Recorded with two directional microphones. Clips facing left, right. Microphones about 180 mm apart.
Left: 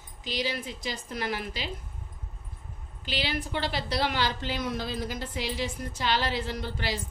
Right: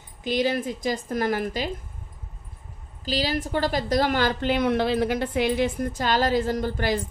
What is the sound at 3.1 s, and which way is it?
A woman's voice, 40° right (ahead or behind).